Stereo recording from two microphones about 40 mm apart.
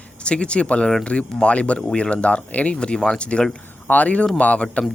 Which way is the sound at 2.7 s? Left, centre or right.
Left.